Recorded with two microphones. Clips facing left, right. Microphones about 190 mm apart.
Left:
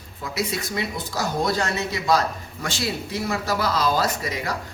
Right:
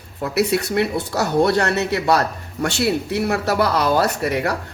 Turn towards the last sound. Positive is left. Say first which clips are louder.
# right 6 dB
turn(degrees=-65)  # may be behind; listen again after turning